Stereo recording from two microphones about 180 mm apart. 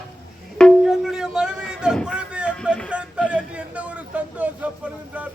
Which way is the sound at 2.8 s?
5° right (ahead or behind).